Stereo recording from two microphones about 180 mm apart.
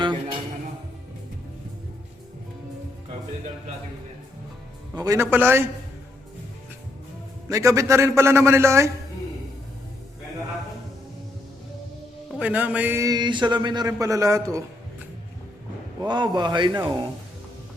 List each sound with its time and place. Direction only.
0.0 s music: 25° right (ahead or behind)
4.9 s a man's voice: 15° right (ahead or behind)
7.4 s a man's voice: 15° right (ahead or behind)
12.3 s a man's voice: 10° right (ahead or behind)
16.0 s a man's voice: 25° right (ahead or behind)